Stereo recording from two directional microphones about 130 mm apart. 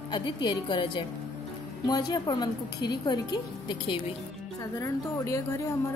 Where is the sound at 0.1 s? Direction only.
35° left (ahead or behind).